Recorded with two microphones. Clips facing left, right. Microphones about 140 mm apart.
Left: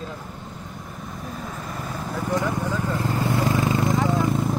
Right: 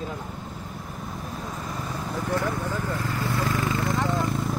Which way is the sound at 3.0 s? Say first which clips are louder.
Left 4 dB; 30° left (ahead or behind).